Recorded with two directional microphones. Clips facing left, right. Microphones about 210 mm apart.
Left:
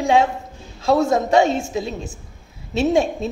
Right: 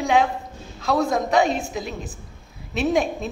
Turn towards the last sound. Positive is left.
turn(degrees=30)  # may be behind; listen again after turning